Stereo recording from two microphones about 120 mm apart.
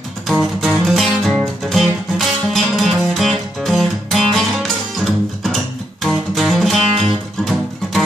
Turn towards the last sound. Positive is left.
turn(degrees=5)  # may be behind; listen again after turning